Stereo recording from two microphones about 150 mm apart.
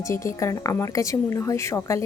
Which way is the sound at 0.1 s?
20° left (ahead or behind).